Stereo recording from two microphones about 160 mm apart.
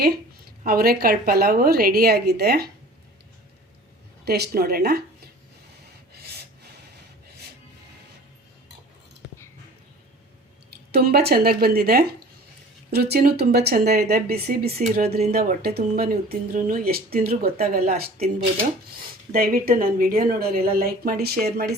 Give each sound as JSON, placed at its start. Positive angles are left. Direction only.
{"t": 0.6, "sound": "a woman's voice", "side_deg": -70}
{"t": 4.3, "sound": "a woman's voice", "side_deg": -75}
{"t": 10.9, "sound": "a woman's voice", "side_deg": -80}
{"t": 19.3, "sound": "a woman's voice", "side_deg": -65}